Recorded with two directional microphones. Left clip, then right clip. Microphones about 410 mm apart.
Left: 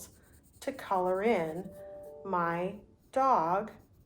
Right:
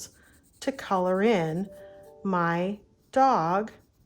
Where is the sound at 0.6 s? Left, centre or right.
Centre.